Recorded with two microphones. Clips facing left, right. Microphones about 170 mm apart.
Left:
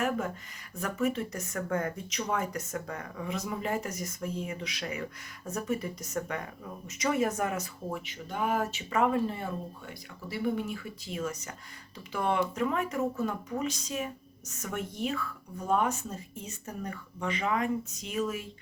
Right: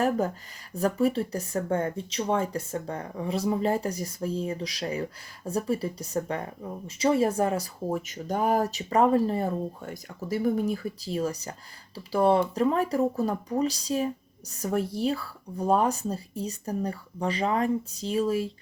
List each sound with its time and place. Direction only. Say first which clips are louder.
0.7 s speech: right 6 dB; 35° right (ahead or behind)